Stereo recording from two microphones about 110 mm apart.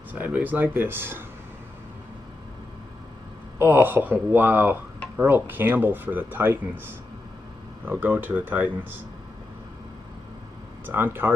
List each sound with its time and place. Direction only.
0.1 s speech: 15° right (ahead or behind)
3.5 s speech: 15° right (ahead or behind)
7.8 s speech: 20° right (ahead or behind)
10.9 s speech: 20° right (ahead or behind)